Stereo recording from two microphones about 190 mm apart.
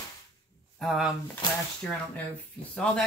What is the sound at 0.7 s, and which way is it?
Speech, centre (ahead or behind).